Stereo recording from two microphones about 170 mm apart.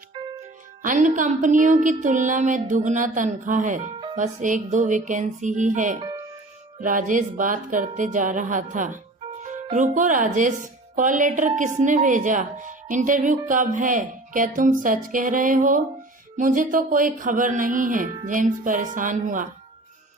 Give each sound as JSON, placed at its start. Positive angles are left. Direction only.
{"t": 0.8, "sound": "speech", "side_deg": -50}
{"t": 6.0, "sound": "music", "side_deg": -20}
{"t": 6.7, "sound": "speech", "side_deg": -50}